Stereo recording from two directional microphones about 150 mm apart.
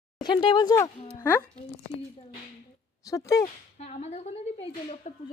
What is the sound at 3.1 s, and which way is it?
Speech, 20° left (ahead or behind).